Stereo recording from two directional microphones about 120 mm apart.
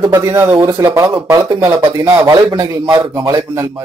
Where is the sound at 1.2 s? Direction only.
35° right (ahead or behind).